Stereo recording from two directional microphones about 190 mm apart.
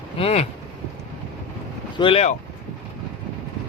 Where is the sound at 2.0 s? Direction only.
30° left (ahead or behind).